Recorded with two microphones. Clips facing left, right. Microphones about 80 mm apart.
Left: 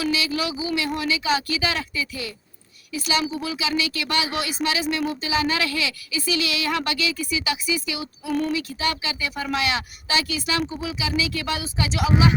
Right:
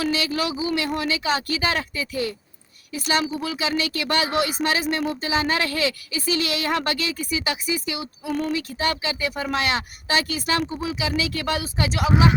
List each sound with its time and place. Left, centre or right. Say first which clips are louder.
0.0 s a woman's voice: right 1 dB; right